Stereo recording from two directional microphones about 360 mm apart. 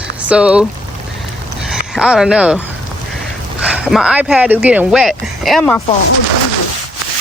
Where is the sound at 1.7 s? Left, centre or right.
Centre.